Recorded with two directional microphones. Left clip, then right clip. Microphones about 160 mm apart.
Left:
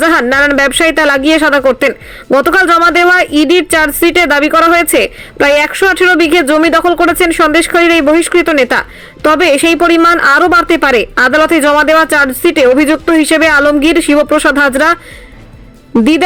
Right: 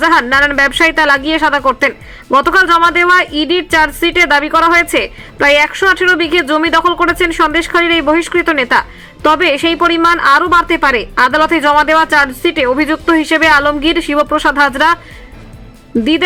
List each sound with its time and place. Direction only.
0.0 s speech: 35° left (ahead or behind)